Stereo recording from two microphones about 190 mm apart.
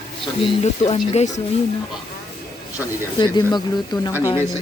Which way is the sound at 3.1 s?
20° left (ahead or behind).